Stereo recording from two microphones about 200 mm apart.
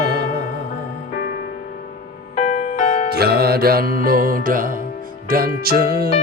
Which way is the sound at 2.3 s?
35° left (ahead or behind).